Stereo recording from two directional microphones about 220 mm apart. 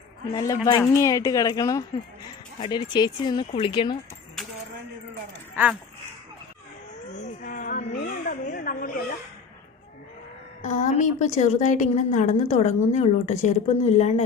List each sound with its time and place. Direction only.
0.3 s a woman's voice: 15° left (ahead or behind)
7.2 s a woman's voice: 35° left (ahead or behind)
10.6 s a woman's voice: 35° left (ahead or behind)